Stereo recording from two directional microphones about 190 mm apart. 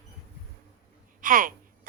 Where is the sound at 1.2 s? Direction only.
45° right (ahead or behind).